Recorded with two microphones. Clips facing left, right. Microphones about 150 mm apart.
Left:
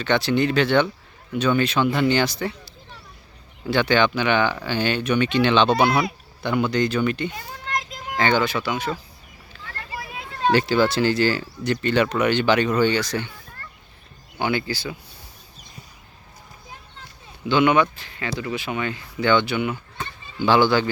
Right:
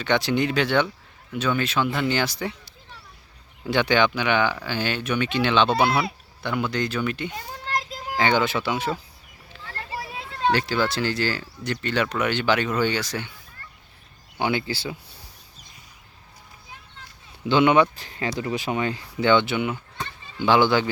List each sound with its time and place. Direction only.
0.0 s speech: 15° right (ahead or behind)
7.3 s children playing: 30° right (ahead or behind)
8.2 s speech: 20° right (ahead or behind)
9.5 s a sound: 30° right (ahead or behind)
10.5 s speech: centre (ahead or behind)
14.3 s speech: 20° right (ahead or behind)
17.5 s speech: 25° right (ahead or behind)
17.9 s speech: 40° right (ahead or behind); by 20.9 s 20° right (ahead or behind)